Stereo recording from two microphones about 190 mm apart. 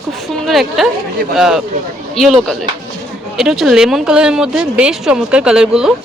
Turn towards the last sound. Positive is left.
turn(degrees=-5)  # may be behind; listen again after turning